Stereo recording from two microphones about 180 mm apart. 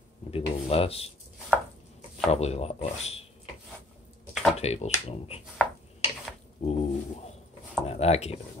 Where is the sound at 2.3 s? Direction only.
35° left (ahead or behind).